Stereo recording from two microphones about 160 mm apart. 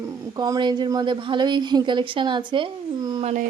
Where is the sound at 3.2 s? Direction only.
50° right (ahead or behind).